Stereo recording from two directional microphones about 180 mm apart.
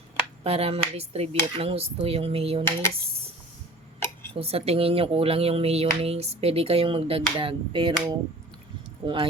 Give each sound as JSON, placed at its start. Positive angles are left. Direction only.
{"t": 0.4, "sound": "speech", "side_deg": -35}
{"t": 4.4, "sound": "speech", "side_deg": -35}
{"t": 9.0, "sound": "speech", "side_deg": -30}